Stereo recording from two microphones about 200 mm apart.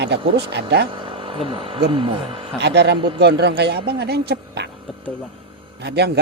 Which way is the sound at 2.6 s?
60° right (ahead or behind).